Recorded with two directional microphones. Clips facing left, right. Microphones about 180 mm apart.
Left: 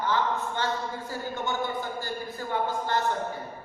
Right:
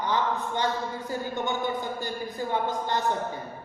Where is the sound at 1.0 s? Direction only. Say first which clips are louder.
Right 3 dB; 20° right (ahead or behind).